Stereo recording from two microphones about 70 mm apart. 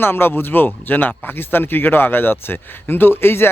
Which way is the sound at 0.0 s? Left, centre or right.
Left.